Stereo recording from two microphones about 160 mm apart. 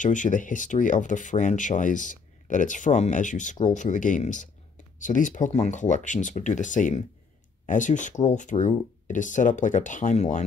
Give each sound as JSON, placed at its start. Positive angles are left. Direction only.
{"t": 0.0, "sound": "speech", "side_deg": 50}